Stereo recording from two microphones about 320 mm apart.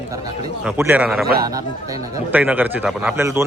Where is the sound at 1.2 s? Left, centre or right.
Right.